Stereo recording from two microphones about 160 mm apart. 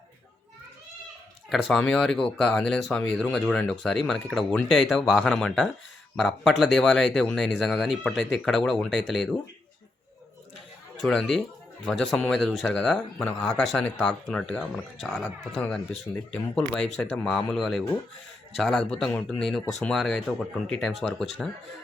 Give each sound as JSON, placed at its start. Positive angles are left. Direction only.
{"t": 1.5, "sound": "speech", "side_deg": 0}
{"t": 11.0, "sound": "speech", "side_deg": 5}